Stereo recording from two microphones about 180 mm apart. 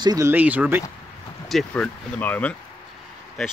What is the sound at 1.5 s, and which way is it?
Speech, 5° left (ahead or behind).